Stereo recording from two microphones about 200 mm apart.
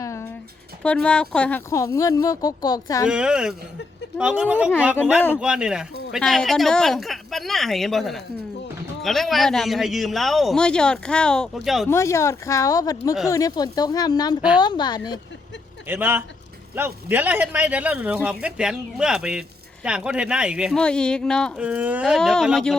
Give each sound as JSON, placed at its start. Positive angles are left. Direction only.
{"t": 0.0, "sound": "a sound", "side_deg": 15}
{"t": 0.8, "sound": "speech", "side_deg": 5}
{"t": 3.1, "sound": "a man's voice", "side_deg": -5}
{"t": 11.9, "sound": "speech", "side_deg": 15}
{"t": 15.9, "sound": "a man's voice", "side_deg": -10}
{"t": 21.7, "sound": "a man's voice", "side_deg": -5}